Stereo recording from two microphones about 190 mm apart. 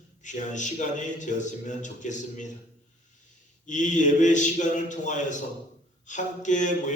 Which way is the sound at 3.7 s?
40° left (ahead or behind).